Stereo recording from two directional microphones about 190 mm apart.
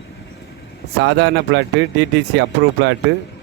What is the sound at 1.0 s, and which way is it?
Speech, 70° right (ahead or behind).